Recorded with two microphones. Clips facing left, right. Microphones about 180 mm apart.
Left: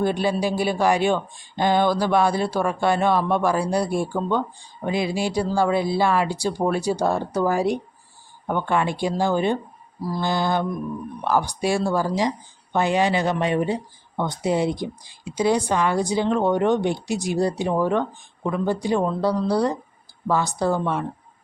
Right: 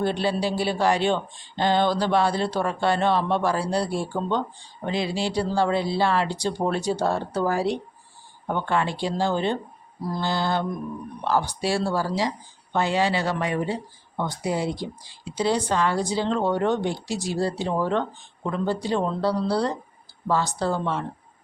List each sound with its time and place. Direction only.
0.0 s speech: 15° left (ahead or behind)